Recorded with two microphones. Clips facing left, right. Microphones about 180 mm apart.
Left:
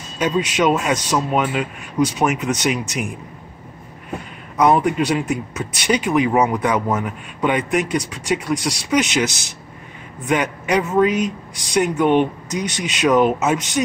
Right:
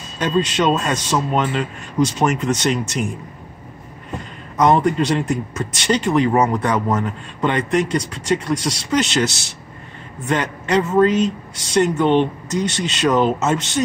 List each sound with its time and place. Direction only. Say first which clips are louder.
0.2 s a man's voice: even; 10° left (ahead or behind)
4.6 s a man's voice: even; 10° left (ahead or behind)